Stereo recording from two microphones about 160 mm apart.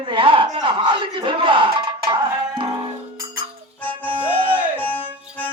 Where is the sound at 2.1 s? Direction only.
30° right (ahead or behind).